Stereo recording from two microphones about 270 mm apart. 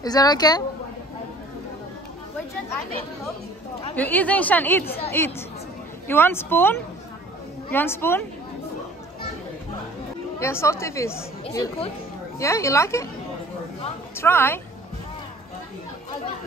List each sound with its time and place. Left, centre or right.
0.0 s a woman's voice: centre
3.9 s a woman's voice: centre
10.4 s a woman's voice: centre
14.1 s a woman's voice: centre